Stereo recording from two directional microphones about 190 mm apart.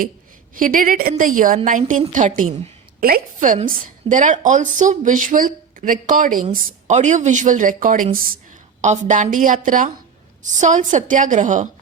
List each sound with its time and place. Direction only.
0.5 s a woman's voice: 45° right (ahead or behind)